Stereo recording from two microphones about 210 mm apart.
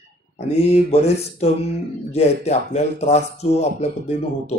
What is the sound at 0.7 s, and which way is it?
Speech, 30° left (ahead or behind).